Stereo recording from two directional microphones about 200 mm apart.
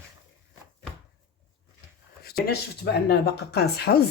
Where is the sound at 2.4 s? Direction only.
55° left (ahead or behind).